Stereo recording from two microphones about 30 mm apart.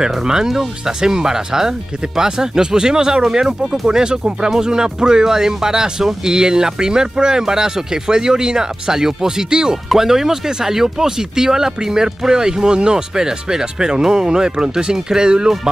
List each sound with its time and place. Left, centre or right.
0.2 s speech: right